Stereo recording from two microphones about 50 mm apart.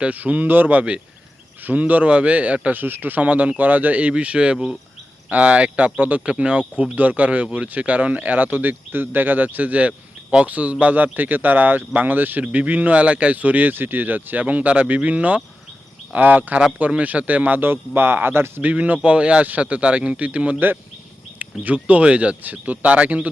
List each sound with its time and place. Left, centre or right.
0.0 s speech: right
2.7 s speech: right
17.6 s speech: right
18.6 s speech: right